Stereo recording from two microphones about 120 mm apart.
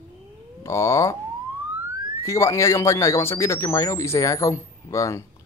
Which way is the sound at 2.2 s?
25° left (ahead or behind).